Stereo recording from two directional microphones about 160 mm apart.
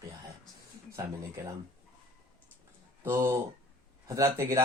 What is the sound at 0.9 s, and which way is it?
Speech, 20° right (ahead or behind).